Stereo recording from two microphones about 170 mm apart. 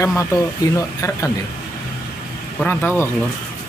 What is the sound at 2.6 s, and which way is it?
Speech, 10° left (ahead or behind).